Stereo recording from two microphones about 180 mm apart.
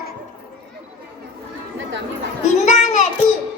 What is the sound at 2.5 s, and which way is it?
Speech, 40° left (ahead or behind).